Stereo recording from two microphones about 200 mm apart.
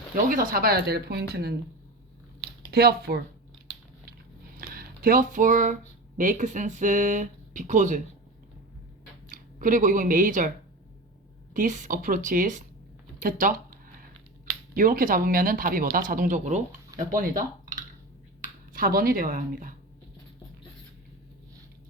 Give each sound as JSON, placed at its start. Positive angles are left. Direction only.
{"t": 0.3, "sound": "speech", "side_deg": -45}
{"t": 2.6, "sound": "speech", "side_deg": -50}
{"t": 4.5, "sound": "a sound", "side_deg": -50}
{"t": 6.1, "sound": "speech", "side_deg": -40}
{"t": 9.3, "sound": "speech", "side_deg": -40}
{"t": 11.5, "sound": "speech", "side_deg": -40}
{"t": 13.1, "sound": "a sound", "side_deg": -45}
{"t": 14.8, "sound": "speech", "side_deg": -45}